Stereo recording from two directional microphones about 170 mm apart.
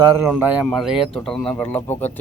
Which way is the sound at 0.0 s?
20° right (ahead or behind).